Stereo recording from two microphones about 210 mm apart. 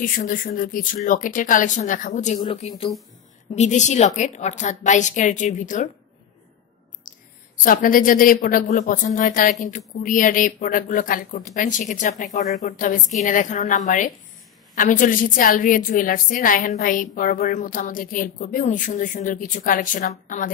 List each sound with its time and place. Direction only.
0.0 s a woman's voice: 40° left (ahead or behind)
7.1 s a woman's voice: 40° left (ahead or behind)